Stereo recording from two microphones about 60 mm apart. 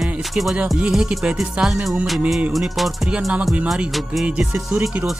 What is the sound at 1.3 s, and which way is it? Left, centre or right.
Music, centre.